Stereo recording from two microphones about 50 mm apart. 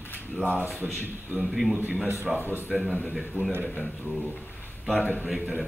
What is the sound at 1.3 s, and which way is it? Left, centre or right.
Speech, centre.